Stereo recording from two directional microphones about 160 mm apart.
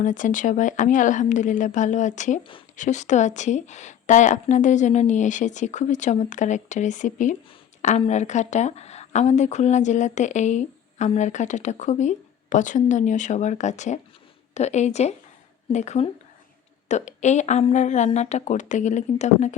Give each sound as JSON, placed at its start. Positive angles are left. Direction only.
{"t": 0.0, "sound": "speech", "side_deg": 55}